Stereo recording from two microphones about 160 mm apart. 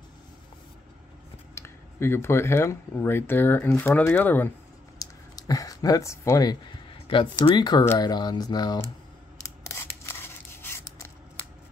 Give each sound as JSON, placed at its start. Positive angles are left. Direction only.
{"t": 1.5, "sound": "speech", "side_deg": 15}
{"t": 4.9, "sound": "a sound", "side_deg": 20}
{"t": 7.1, "sound": "speech", "side_deg": 30}
{"t": 9.4, "sound": "scissors", "side_deg": 20}